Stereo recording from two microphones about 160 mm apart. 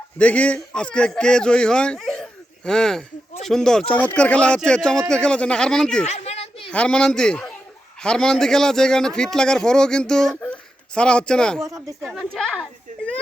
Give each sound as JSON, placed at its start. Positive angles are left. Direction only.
{"t": 0.2, "sound": "a man's voice", "side_deg": 10}
{"t": 6.1, "sound": "a sound", "side_deg": 40}
{"t": 6.7, "sound": "a man's voice", "side_deg": 5}
{"t": 11.6, "sound": "speech", "side_deg": -20}
{"t": 12.0, "sound": "a man's voice", "side_deg": 0}